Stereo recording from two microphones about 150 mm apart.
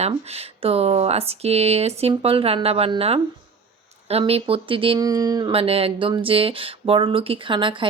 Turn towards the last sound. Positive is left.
turn(degrees=-35)  # may be behind; listen again after turning